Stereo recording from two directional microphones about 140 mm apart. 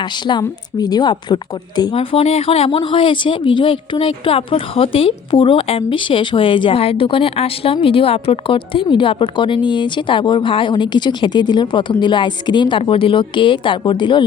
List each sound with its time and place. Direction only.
0.3 s speech: 30° left (ahead or behind)
2.0 s speech: 45° left (ahead or behind)